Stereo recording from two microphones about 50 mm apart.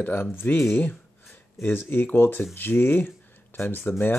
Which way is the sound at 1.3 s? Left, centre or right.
Left.